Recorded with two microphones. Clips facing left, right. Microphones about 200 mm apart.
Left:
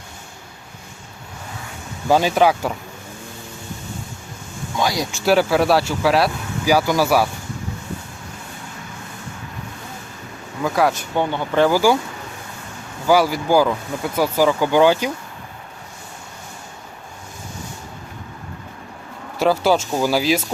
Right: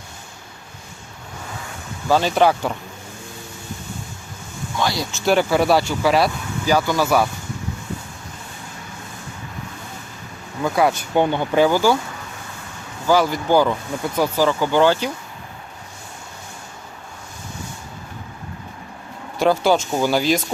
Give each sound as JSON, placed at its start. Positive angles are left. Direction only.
{"t": 2.0, "sound": "speech", "side_deg": 10}
{"t": 4.8, "sound": "speech", "side_deg": 15}
{"t": 10.6, "sound": "speech", "side_deg": 0}
{"t": 11.1, "sound": "speech", "side_deg": -15}
{"t": 11.7, "sound": "speech", "side_deg": 10}
{"t": 13.1, "sound": "speech", "side_deg": 10}
{"t": 19.4, "sound": "speech", "side_deg": 5}